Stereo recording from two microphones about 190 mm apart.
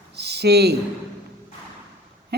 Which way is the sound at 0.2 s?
60° right (ahead or behind).